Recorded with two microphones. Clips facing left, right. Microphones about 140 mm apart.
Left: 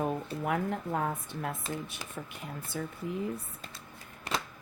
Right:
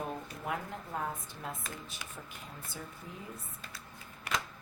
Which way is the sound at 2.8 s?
70° left (ahead or behind).